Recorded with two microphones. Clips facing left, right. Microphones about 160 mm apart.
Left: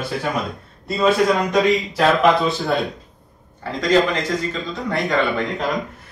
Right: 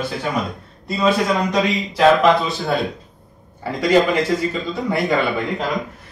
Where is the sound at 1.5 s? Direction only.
Centre (ahead or behind).